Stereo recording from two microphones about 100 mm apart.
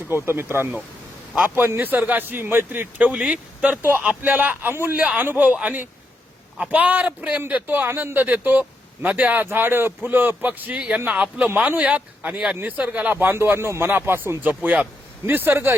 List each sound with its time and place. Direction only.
0.3 s a man's voice: 25° right (ahead or behind)